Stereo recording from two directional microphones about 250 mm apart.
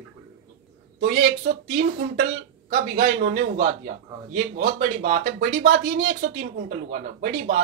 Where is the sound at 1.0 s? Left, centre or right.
Right.